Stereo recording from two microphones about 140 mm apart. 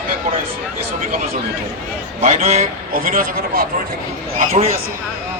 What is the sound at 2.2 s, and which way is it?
Speech, 55° right (ahead or behind).